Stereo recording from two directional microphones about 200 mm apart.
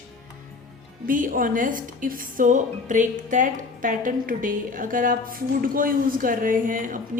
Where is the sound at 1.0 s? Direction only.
45° right (ahead or behind).